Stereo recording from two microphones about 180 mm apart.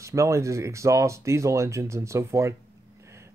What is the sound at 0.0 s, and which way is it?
Speech, 15° right (ahead or behind).